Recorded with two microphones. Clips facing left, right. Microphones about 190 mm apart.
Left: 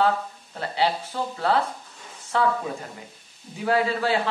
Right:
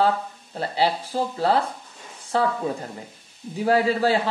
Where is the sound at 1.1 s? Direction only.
30° right (ahead or behind).